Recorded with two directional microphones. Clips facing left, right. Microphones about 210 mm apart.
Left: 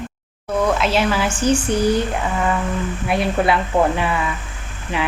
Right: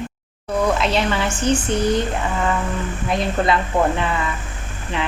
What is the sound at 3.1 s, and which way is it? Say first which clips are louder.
Speech: left 1 dB; 10° left (ahead or behind).